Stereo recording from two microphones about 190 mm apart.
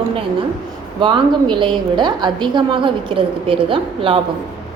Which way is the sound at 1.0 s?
25° right (ahead or behind).